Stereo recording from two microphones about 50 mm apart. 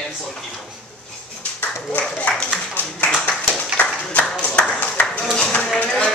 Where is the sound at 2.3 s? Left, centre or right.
Left.